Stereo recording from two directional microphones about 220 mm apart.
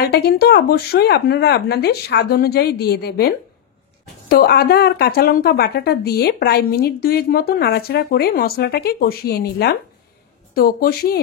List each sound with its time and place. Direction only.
0.0 s a woman's voice: 45° left (ahead or behind)